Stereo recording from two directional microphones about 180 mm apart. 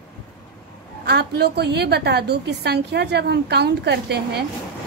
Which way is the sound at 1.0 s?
65° right (ahead or behind).